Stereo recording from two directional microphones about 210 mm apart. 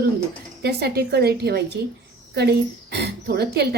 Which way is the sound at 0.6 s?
50° right (ahead or behind).